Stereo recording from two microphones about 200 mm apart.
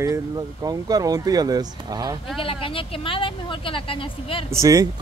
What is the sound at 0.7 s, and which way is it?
Speech, 20° right (ahead or behind).